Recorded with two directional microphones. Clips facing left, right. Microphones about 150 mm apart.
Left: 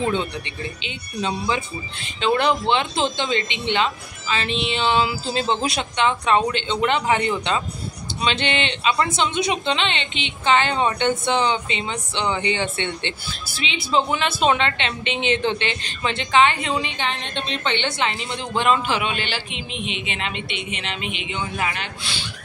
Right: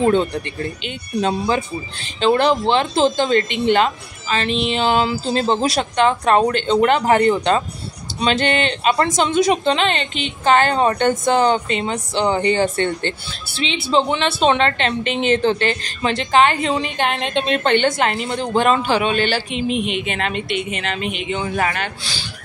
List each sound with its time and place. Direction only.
0.0 s a woman's voice: 40° right (ahead or behind)
1.5 s a woman's voice: 35° right (ahead or behind)
13.5 s a woman's voice: 30° right (ahead or behind)
17.1 s a woman's voice: 70° right (ahead or behind)
17.6 s a woman's voice: 45° right (ahead or behind)